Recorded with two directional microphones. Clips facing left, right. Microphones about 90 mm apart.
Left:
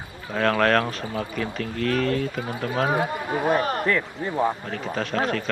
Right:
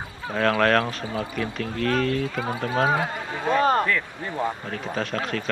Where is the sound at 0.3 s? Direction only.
Centre (ahead or behind).